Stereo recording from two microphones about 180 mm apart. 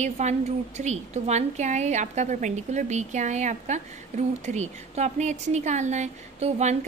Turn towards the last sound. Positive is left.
turn(degrees=-40)  # may be behind; listen again after turning